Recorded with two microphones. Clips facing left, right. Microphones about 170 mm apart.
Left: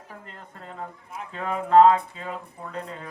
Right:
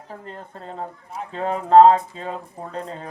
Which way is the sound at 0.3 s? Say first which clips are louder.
Right 6 dB; 35° right (ahead or behind).